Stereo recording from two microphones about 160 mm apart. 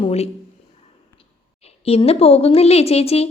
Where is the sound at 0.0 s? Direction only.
40° left (ahead or behind).